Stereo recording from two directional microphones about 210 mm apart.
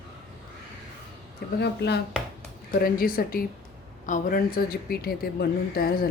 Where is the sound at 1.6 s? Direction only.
50° left (ahead or behind).